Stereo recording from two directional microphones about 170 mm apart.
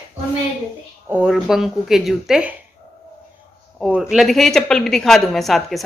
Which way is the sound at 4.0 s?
Centre (ahead or behind).